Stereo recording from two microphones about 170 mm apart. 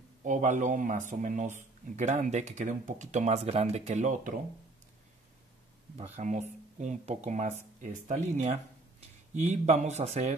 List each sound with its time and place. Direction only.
0.2 s speech: 45° right (ahead or behind)
6.1 s speech: 45° right (ahead or behind)